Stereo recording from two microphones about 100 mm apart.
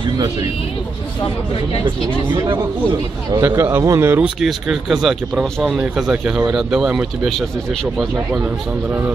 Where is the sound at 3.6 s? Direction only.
30° right (ahead or behind).